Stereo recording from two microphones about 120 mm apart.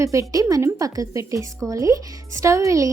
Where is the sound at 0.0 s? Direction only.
25° right (ahead or behind).